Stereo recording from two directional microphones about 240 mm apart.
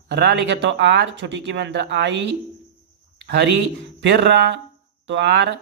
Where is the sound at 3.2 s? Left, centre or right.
Right.